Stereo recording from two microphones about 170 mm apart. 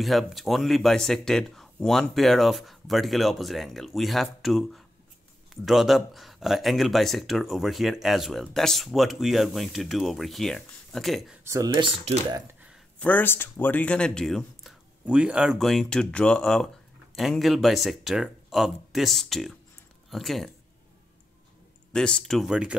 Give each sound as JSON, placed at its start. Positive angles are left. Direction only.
{"t": 0.0, "sound": "speech", "side_deg": 0}
{"t": 11.4, "sound": "speech", "side_deg": -20}
{"t": 13.0, "sound": "speech", "side_deg": 10}
{"t": 21.9, "sound": "speech", "side_deg": 5}